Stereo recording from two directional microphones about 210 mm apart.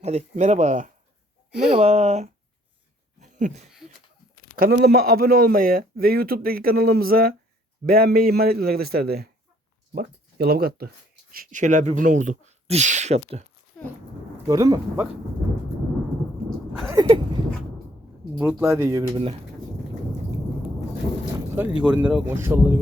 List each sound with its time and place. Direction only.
0.0 s speech: 30° right (ahead or behind)
3.2 s a sound: 35° right (ahead or behind)
4.5 s a man's voice: 50° right (ahead or behind); by 13.4 s 35° right (ahead or behind)
14.4 s speech: 15° right (ahead or behind)
16.9 s a sound: 20° right (ahead or behind)
18.3 s speech: 10° right (ahead or behind)
21.5 s speech: 5° right (ahead or behind)